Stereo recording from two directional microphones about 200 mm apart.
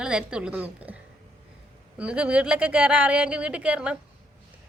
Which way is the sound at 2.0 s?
5° right (ahead or behind).